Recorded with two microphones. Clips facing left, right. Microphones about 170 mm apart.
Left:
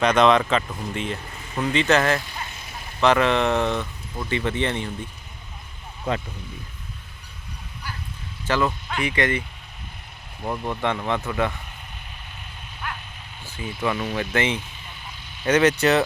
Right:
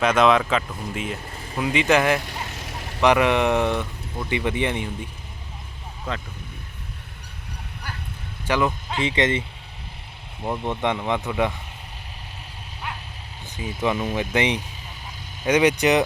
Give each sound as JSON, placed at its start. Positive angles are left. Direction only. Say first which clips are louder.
{"t": 0.0, "sound": "speech", "louder": "left 1 dB", "side_deg": -5}
{"t": 1.3, "sound": "vehicle", "louder": "right 2 dB", "side_deg": -30}
{"t": 1.5, "sound": "speech", "louder": "even", "side_deg": -10}
{"t": 2.2, "sound": "vehicle", "louder": "right 3 dB", "side_deg": -80}
{"t": 3.0, "sound": "speech", "louder": "right 1 dB", "side_deg": -15}
{"t": 8.4, "sound": "speech", "louder": "right 1 dB", "side_deg": -15}
{"t": 10.4, "sound": "speech", "louder": "right 1 dB", "side_deg": -20}
{"t": 13.8, "sound": "speech", "louder": "right 2 dB", "side_deg": -20}